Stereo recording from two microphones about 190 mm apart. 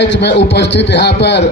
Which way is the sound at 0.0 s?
65° left (ahead or behind).